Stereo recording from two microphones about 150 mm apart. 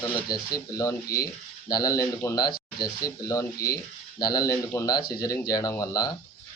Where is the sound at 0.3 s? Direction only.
25° left (ahead or behind).